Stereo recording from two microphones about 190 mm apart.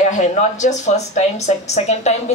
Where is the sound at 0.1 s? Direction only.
40° left (ahead or behind).